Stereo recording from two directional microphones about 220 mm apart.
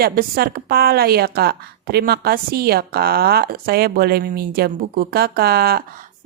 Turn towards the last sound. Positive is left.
turn(degrees=-45)  # may be behind; listen again after turning